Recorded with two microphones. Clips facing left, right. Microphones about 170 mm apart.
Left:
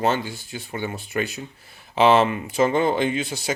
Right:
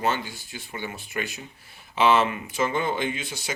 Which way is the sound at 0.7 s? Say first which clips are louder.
Left 5 dB; 40° left (ahead or behind).